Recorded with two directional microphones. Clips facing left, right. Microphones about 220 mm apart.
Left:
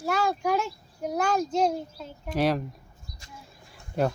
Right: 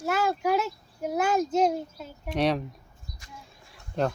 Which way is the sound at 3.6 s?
5° left (ahead or behind).